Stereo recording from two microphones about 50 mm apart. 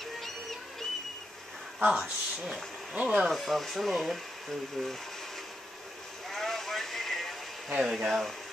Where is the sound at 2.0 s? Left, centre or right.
Centre.